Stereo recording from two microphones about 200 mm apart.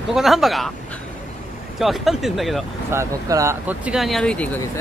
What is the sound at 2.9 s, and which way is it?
Speech, 15° right (ahead or behind).